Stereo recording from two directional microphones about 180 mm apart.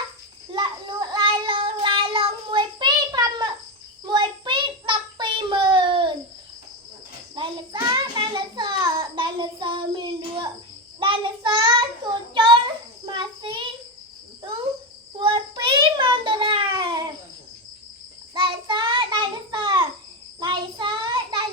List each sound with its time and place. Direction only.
0.5 s child singing: 25° right (ahead or behind)
7.3 s child singing: 25° right (ahead or behind)
12.3 s a sound: 25° right (ahead or behind)
13.1 s child singing: 25° right (ahead or behind)
15.2 s child singing: 25° right (ahead or behind)
18.3 s child singing: 25° right (ahead or behind)